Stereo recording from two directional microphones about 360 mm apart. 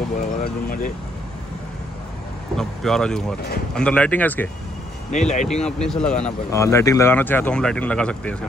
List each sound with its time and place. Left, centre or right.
0.4 s speech: left
2.5 s speech: centre
5.1 s speech: centre
5.6 s speech: centre